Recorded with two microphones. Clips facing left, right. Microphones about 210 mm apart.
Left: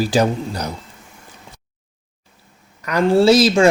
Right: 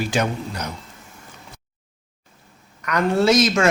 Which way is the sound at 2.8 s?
30° left (ahead or behind).